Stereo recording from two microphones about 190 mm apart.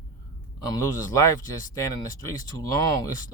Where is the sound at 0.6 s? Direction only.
20° left (ahead or behind).